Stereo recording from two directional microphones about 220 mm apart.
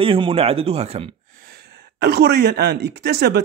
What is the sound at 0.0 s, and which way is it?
Speech, 25° right (ahead or behind).